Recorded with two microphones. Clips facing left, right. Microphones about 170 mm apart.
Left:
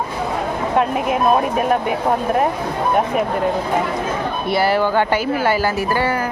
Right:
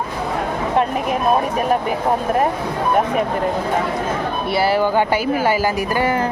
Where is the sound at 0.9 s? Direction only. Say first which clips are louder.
Left 1 dB; 5° left (ahead or behind).